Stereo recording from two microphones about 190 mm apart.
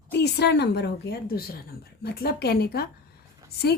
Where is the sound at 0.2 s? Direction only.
60° left (ahead or behind).